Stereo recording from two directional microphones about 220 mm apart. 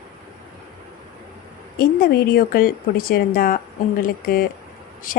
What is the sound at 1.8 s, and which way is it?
A woman's voice, 45° left (ahead or behind).